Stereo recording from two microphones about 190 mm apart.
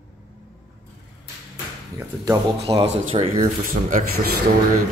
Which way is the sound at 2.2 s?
20° right (ahead or behind).